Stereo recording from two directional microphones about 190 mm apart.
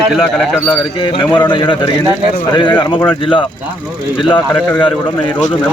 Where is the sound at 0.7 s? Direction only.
25° left (ahead or behind).